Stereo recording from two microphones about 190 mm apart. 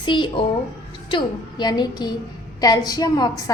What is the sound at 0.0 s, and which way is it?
A woman's voice, 25° left (ahead or behind).